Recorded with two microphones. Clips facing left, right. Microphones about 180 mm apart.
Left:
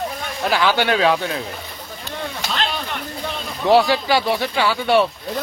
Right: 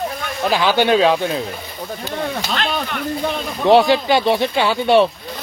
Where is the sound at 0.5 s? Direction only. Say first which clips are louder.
Right 3 dB; 20° right (ahead or behind).